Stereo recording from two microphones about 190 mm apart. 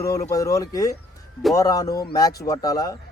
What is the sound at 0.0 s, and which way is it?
Speech, 15° left (ahead or behind).